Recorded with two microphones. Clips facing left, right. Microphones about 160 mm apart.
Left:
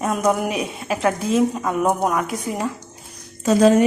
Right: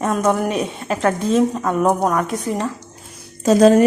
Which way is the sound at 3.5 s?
45° right (ahead or behind).